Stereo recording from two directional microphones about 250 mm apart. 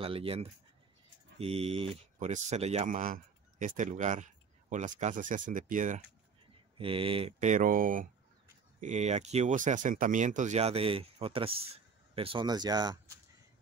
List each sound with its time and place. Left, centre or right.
0.0 s speech: right
6.8 s speech: right